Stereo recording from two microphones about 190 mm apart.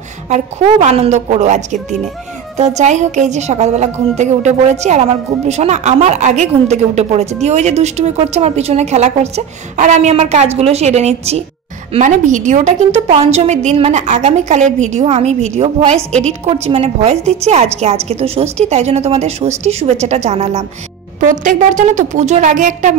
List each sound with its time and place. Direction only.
0.3 s a woman's voice: 35° right (ahead or behind)